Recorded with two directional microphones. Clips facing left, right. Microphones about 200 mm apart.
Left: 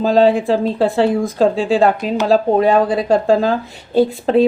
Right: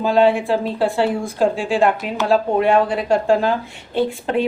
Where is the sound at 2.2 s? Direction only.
35° left (ahead or behind).